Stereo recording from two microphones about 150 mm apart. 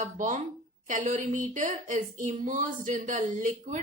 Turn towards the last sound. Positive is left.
turn(degrees=-60)  # may be behind; listen again after turning